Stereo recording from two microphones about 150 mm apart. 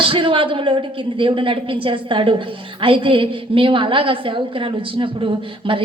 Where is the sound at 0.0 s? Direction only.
35° right (ahead or behind).